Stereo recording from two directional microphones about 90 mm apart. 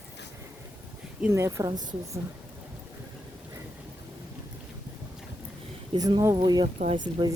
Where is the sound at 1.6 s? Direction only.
45° right (ahead or behind).